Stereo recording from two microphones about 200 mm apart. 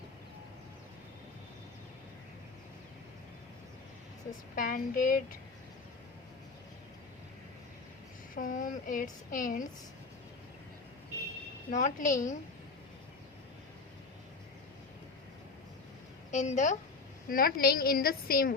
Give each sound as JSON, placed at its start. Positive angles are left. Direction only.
{"t": 4.5, "sound": "speech", "side_deg": 45}
{"t": 8.4, "sound": "speech", "side_deg": 40}
{"t": 11.7, "sound": "a woman's voice", "side_deg": 40}
{"t": 16.3, "sound": "a woman's voice", "side_deg": 35}
{"t": 17.2, "sound": "speech", "side_deg": 45}